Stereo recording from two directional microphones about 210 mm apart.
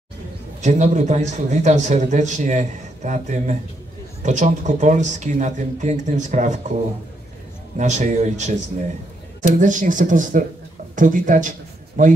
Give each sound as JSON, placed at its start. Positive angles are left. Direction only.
{"t": 0.6, "sound": "a man's voice", "side_deg": -35}
{"t": 7.7, "sound": "a man's voice", "side_deg": -35}
{"t": 9.6, "sound": "a man's voice", "side_deg": -40}